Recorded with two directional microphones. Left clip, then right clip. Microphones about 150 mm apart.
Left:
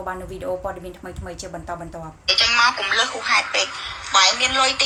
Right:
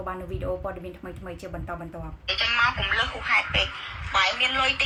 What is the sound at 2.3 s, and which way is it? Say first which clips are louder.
Speech: left 6 dB; 45° left (ahead or behind).